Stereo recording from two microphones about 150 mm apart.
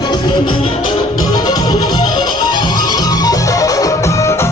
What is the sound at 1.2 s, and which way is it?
Music, 25° left (ahead or behind).